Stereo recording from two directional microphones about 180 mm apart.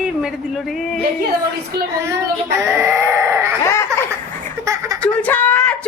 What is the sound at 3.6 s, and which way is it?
Baby laughter, 15° left (ahead or behind).